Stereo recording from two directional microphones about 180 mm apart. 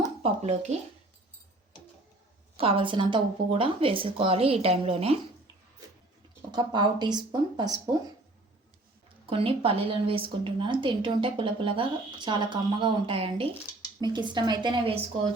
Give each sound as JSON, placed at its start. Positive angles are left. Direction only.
{"t": 0.2, "sound": "speech", "side_deg": -35}
{"t": 2.6, "sound": "speech", "side_deg": -30}
{"t": 6.5, "sound": "speech", "side_deg": -25}
{"t": 9.3, "sound": "speech", "side_deg": -30}